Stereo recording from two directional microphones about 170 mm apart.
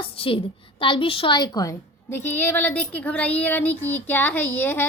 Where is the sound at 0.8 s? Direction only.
30° left (ahead or behind).